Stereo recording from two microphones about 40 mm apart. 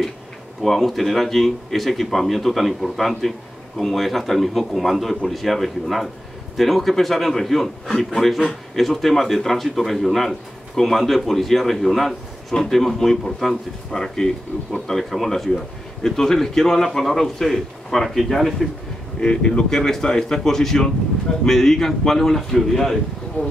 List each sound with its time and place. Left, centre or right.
0.6 s a man's voice: centre
19.1 s speech: left; by 22.9 s centre
23.4 s speech: left